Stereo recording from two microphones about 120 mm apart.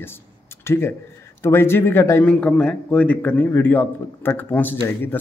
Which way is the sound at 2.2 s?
10° left (ahead or behind).